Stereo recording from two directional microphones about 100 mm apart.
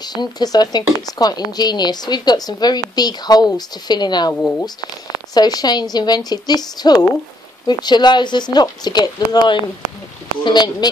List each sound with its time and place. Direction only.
0.0 s speech: 45° left (ahead or behind)
4.3 s speech: 20° left (ahead or behind)
5.3 s speech: 40° left (ahead or behind)